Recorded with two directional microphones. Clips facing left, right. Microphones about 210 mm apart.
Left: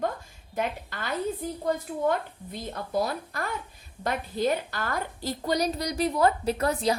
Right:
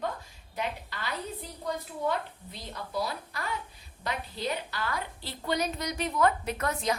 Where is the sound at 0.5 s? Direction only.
50° left (ahead or behind).